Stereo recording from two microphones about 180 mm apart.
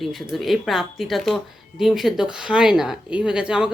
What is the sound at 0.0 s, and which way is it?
Speech, centre (ahead or behind).